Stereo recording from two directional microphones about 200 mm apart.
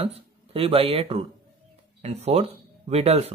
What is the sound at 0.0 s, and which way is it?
Speech, 30° right (ahead or behind).